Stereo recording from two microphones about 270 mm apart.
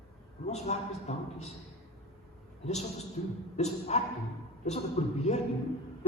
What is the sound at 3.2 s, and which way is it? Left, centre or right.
A man's voice, centre.